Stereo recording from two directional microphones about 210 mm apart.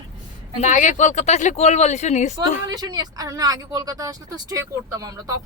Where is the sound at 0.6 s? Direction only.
35° left (ahead or behind).